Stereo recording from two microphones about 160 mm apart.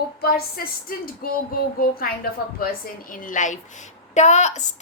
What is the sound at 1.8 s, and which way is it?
Speech, 65° left (ahead or behind).